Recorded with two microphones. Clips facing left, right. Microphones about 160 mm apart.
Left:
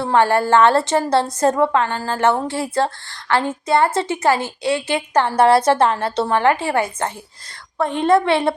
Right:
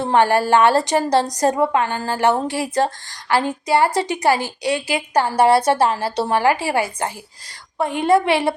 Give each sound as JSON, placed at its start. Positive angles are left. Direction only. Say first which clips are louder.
{"t": 0.0, "sound": "a woman's voice", "louder": "even", "side_deg": -15}